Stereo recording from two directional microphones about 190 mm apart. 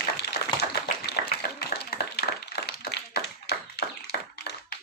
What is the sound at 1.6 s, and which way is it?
Clapping, 55° left (ahead or behind).